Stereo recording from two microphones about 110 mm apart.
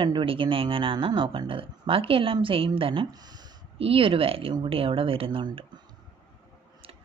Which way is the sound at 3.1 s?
40° right (ahead or behind).